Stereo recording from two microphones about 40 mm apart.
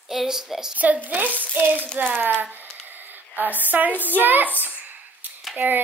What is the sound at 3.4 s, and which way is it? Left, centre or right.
Speech, right.